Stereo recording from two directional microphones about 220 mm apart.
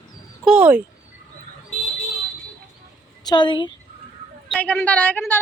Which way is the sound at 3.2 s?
20° left (ahead or behind).